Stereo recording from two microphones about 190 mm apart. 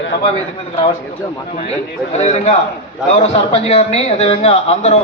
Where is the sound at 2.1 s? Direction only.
35° left (ahead or behind).